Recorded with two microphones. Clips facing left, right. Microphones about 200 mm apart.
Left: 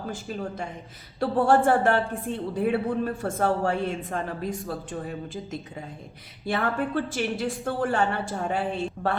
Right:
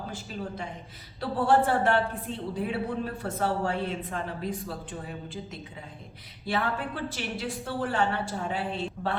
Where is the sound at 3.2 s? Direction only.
50° left (ahead or behind).